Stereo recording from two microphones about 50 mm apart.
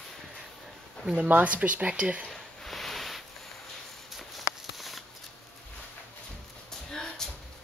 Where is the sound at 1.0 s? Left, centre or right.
Centre.